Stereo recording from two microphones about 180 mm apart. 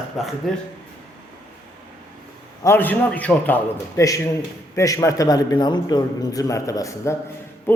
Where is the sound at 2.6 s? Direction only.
10° left (ahead or behind).